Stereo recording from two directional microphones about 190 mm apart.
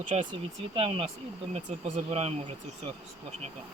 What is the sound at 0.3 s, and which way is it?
Speech, 30° right (ahead or behind).